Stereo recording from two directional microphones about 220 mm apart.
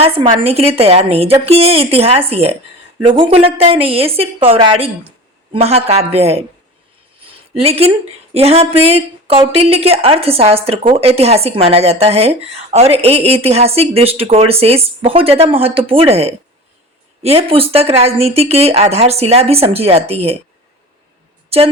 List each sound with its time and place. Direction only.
0.0 s speech: 25° right (ahead or behind)
7.6 s speech: 25° right (ahead or behind)